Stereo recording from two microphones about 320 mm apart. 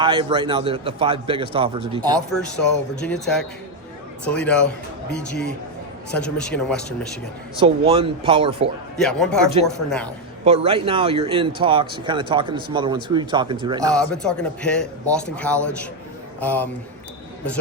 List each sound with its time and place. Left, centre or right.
0.0 s speech: centre
3.0 s a man's voice: centre
7.6 s speech: centre
9.0 s a man's voice: centre
10.4 s speech: centre
13.9 s a man's voice: centre